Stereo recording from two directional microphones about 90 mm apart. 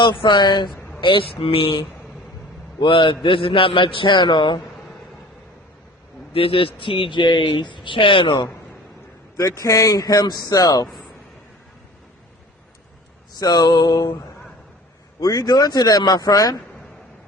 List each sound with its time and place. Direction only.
0.0 s speech: 65° left (ahead or behind)
1.0 s a man's voice: 80° left
2.8 s speech: 65° left (ahead or behind)
6.3 s speech: 90° left; by 8.4 s 65° left (ahead or behind)
9.4 s a man's voice: 40° left (ahead or behind)
13.4 s a man's voice: 50° left (ahead or behind)
15.2 s a man's voice: 45° left (ahead or behind)